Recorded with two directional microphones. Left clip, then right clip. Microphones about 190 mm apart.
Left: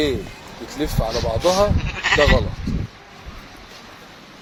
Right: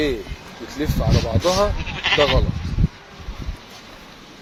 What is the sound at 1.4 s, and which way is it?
Speech, 10° left (ahead or behind).